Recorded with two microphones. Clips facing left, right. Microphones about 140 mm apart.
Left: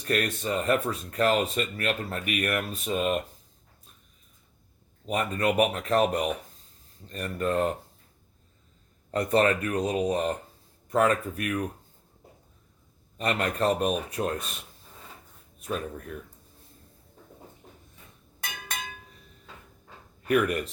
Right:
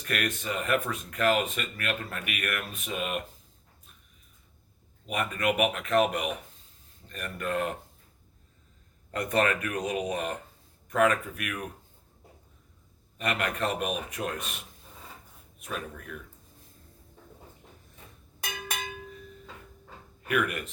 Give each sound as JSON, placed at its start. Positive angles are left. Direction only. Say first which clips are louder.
{"t": 0.1, "sound": "speech", "louder": "left 4 dB", "side_deg": 35}
{"t": 5.0, "sound": "speech", "louder": "left 2 dB", "side_deg": 35}
{"t": 9.1, "sound": "speech", "louder": "left 4 dB", "side_deg": 30}
{"t": 13.1, "sound": "speech", "louder": "left 3 dB", "side_deg": 35}
{"t": 15.5, "sound": "speech", "louder": "left 5 dB", "side_deg": 30}
{"t": 20.2, "sound": "speech", "louder": "left 5 dB", "side_deg": 35}